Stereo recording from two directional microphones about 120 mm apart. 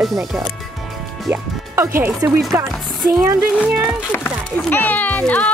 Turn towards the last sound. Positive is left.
turn(degrees=10)  # may be behind; listen again after turning